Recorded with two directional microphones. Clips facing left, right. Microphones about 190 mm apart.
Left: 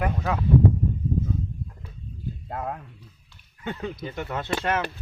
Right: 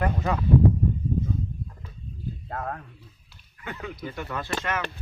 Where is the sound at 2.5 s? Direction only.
10° left (ahead or behind).